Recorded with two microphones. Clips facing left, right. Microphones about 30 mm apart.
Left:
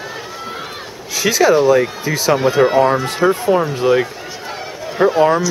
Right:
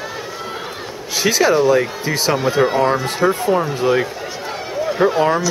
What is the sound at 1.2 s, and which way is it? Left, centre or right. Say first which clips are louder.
Speech: left 1 dB; right.